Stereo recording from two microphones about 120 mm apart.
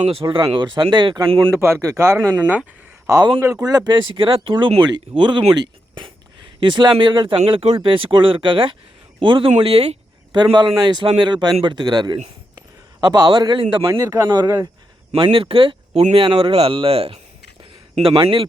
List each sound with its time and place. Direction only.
0.0 s speech: 50° right (ahead or behind)
1.5 s speech: 20° right (ahead or behind)
3.1 s speech: 30° right (ahead or behind)
9.5 s speech: 55° right (ahead or behind)
10.3 s a man's voice: 40° right (ahead or behind)
13.9 s speech: 25° right (ahead or behind)
15.1 s speech: 50° right (ahead or behind)
18.2 s speech: 45° right (ahead or behind)